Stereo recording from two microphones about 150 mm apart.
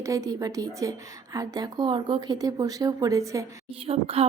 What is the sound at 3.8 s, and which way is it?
Speech, 40° right (ahead or behind).